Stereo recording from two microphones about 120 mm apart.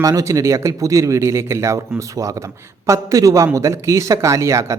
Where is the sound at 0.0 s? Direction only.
30° right (ahead or behind).